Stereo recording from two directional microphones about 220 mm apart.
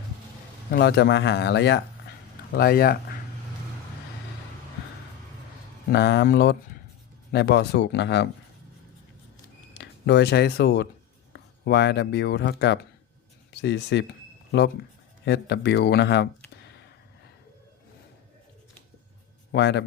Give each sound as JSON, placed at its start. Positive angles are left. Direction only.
{"t": 0.7, "sound": "speech", "side_deg": 45}
{"t": 5.9, "sound": "speech", "side_deg": 50}
{"t": 9.7, "sound": "speech", "side_deg": 50}
{"t": 15.2, "sound": "speech", "side_deg": 50}
{"t": 19.5, "sound": "speech", "side_deg": 50}